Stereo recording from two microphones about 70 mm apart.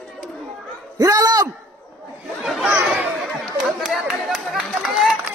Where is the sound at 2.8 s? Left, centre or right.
Centre.